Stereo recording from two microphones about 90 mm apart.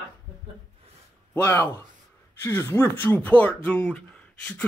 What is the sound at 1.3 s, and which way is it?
Speech, 20° left (ahead or behind).